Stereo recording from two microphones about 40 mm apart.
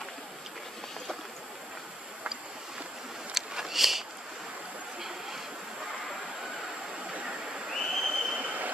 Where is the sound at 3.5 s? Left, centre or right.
Centre.